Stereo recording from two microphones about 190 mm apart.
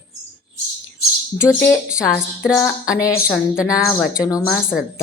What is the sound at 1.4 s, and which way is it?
A woman's voice, 15° left (ahead or behind).